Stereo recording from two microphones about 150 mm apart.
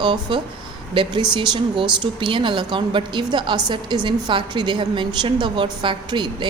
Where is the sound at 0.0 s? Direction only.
30° right (ahead or behind).